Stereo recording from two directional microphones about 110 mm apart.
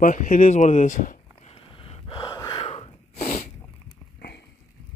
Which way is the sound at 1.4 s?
60° left (ahead or behind).